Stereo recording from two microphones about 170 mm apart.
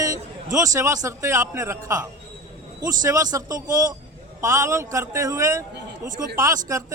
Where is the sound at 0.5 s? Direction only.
20° right (ahead or behind).